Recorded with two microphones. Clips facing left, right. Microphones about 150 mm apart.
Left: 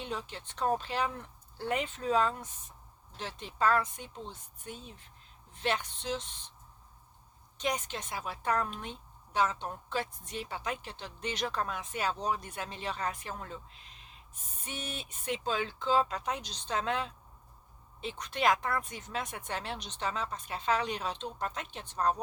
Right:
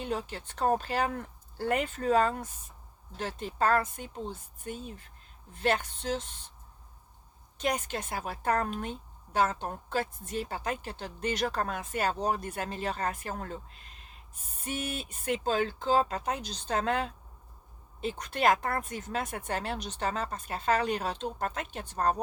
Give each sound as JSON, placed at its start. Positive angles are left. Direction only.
{"t": 0.0, "sound": "speech", "side_deg": -45}
{"t": 7.6, "sound": "speech", "side_deg": -55}
{"t": 15.2, "sound": "speech", "side_deg": -45}